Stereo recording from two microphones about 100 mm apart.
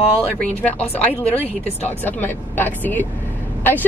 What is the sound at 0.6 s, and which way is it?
Speech, 15° left (ahead or behind).